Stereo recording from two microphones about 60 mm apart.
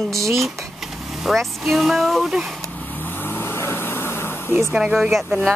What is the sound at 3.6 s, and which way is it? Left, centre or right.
Vehicle, left.